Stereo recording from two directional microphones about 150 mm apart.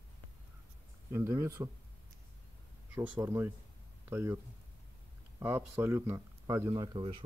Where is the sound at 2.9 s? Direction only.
15° right (ahead or behind).